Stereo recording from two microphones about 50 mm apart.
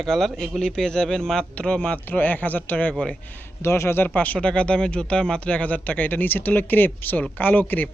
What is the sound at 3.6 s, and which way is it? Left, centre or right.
Speech, left.